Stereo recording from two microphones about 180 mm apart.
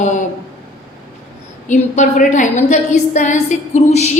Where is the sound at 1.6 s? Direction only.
45° left (ahead or behind).